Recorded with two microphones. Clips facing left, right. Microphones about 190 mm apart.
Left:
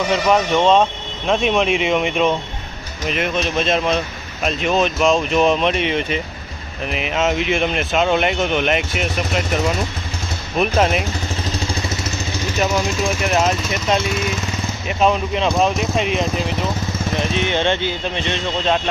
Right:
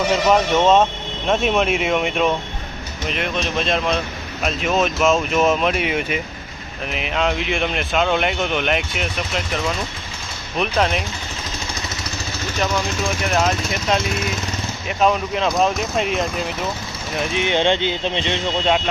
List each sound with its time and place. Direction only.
0.1 s speech: 5° right (ahead or behind)
10.6 s speech: 5° left (ahead or behind)
15.0 s speech: 5° left (ahead or behind)
17.3 s speech: 15° right (ahead or behind)